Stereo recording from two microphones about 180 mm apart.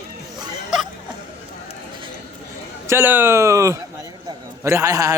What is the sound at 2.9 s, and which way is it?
A man's voice, 10° right (ahead or behind).